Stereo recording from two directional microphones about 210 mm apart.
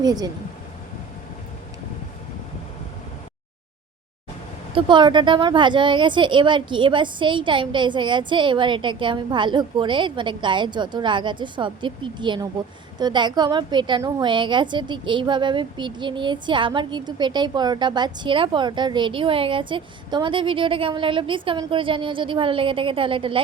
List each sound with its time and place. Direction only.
0.0 s speech: 20° right (ahead or behind)
4.7 s a woman's voice: 20° right (ahead or behind)